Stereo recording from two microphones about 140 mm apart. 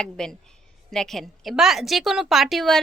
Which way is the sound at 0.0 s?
5° left (ahead or behind).